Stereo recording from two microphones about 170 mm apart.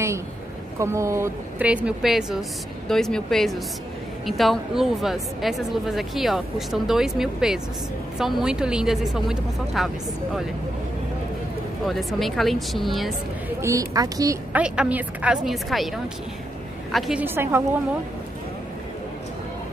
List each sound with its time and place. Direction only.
0.7 s speech: 15° right (ahead or behind)
11.8 s speech: centre (ahead or behind)
13.6 s a woman's voice: 20° right (ahead or behind)
14.5 s speech: 10° right (ahead or behind)
16.9 s speech: 10° right (ahead or behind)